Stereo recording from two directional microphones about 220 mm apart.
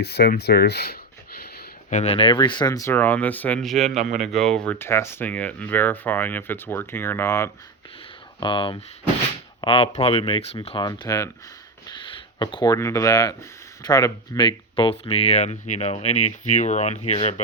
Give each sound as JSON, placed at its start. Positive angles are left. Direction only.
{"t": 0.0, "sound": "speech", "side_deg": 45}
{"t": 3.9, "sound": "speech", "side_deg": -30}
{"t": 4.4, "sound": "speech", "side_deg": 5}
{"t": 8.4, "sound": "speech", "side_deg": 20}